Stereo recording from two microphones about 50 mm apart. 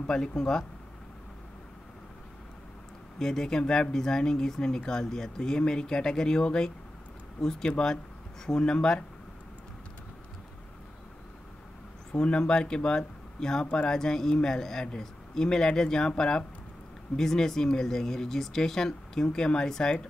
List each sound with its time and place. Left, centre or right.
0.0 s speech: centre
3.2 s speech: centre
12.1 s speech: centre
13.9 s speech: centre